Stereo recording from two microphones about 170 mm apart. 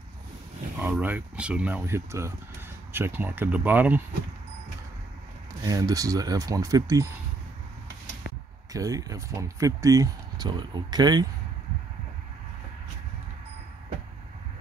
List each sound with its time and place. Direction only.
0.7 s speech: 10° right (ahead or behind)
5.6 s speech: 20° right (ahead or behind)
8.7 s speech: 20° right (ahead or behind)